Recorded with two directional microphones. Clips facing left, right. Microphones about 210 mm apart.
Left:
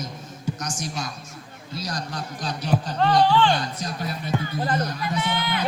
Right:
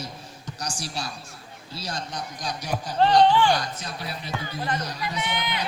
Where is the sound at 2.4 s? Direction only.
10° right (ahead or behind).